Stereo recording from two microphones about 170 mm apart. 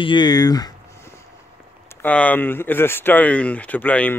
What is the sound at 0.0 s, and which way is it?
Speech, 25° left (ahead or behind).